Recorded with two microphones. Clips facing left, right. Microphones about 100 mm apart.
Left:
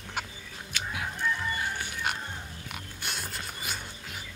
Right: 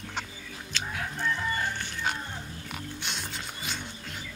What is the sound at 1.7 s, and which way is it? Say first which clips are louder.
Pig: right 1 dB; 10° left (ahead or behind).